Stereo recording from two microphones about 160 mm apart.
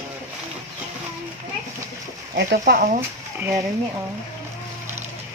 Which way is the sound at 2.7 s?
90° right.